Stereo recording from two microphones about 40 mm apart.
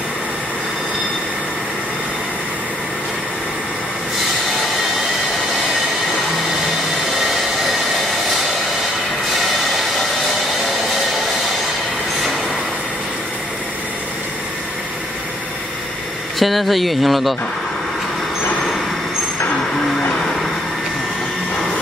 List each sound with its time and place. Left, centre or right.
16.3 s speech: centre